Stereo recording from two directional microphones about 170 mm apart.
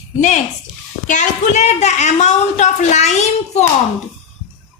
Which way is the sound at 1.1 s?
45° left (ahead or behind).